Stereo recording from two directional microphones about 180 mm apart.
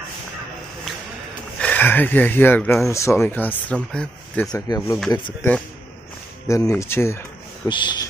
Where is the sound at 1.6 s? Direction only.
10° left (ahead or behind).